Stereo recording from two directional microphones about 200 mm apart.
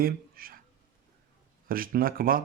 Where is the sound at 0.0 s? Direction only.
45° right (ahead or behind).